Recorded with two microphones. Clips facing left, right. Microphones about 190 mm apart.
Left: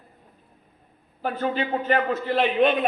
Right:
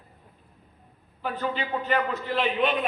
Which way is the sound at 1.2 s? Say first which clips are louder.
Left 4 dB; 40° left (ahead or behind).